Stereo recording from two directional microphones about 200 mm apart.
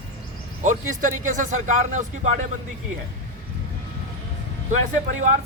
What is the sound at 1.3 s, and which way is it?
Speech, 40° right (ahead or behind).